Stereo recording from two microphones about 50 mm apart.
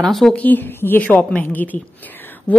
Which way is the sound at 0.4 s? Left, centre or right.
Left.